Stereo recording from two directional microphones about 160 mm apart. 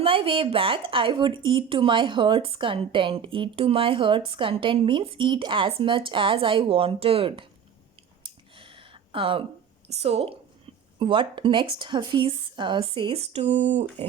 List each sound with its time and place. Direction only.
0.0 s a woman's voice: 35° right (ahead or behind)
8.2 s a sound: 30° right (ahead or behind)
9.9 s a woman's voice: 40° right (ahead or behind)